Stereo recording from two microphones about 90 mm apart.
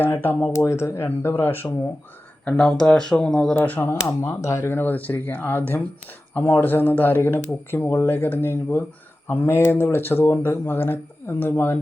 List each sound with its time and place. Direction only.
0.0 s speech: 25° left (ahead or behind)
2.5 s speech: 10° left (ahead or behind)
3.6 s speech: 25° left (ahead or behind)